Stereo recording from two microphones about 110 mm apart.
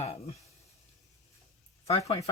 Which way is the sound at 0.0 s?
65° left (ahead or behind).